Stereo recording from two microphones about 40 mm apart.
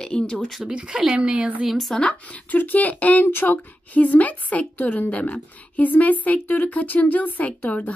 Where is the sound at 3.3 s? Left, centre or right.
Left.